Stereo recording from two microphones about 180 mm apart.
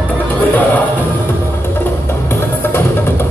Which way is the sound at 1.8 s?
15° left (ahead or behind).